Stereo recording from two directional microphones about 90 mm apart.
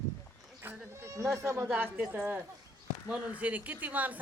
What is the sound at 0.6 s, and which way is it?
Bleat, 30° right (ahead or behind).